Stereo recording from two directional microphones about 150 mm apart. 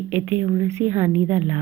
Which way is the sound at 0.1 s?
15° right (ahead or behind).